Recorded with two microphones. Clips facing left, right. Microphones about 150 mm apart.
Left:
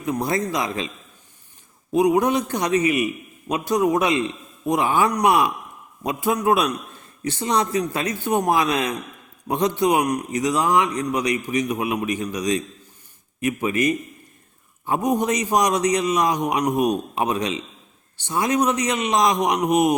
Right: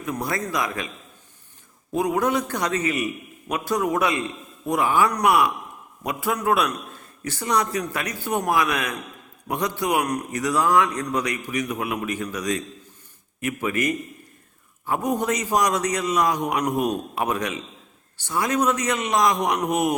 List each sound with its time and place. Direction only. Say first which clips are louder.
0.0 s a man's voice: left 4 dB; 20° left (ahead or behind)
1.9 s a man's voice: left 4 dB; 20° left (ahead or behind)